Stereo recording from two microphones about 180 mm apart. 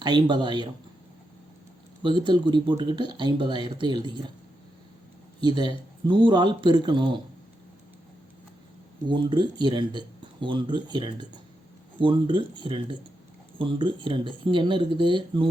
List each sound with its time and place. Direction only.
0.0 s speech: 25° right (ahead or behind)
2.0 s speech: 25° right (ahead or behind)
5.4 s speech: 25° right (ahead or behind)
9.0 s speech: 25° right (ahead or behind)